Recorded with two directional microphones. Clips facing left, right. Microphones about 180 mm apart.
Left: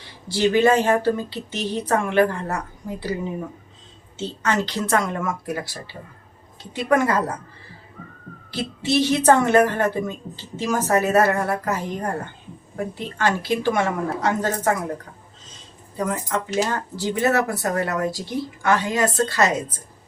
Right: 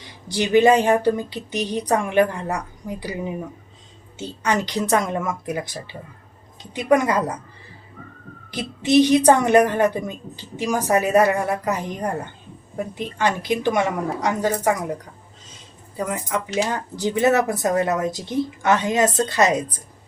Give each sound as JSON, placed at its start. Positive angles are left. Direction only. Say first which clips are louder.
{"t": 0.3, "sound": "a woman's voice", "louder": "right 2 dB", "side_deg": -15}
{"t": 4.2, "sound": "a woman's voice", "louder": "even", "side_deg": -15}
{"t": 8.4, "sound": "a woman's voice", "louder": "right 2 dB", "side_deg": -15}
{"t": 16.0, "sound": "speech", "louder": "left 1 dB", "side_deg": -10}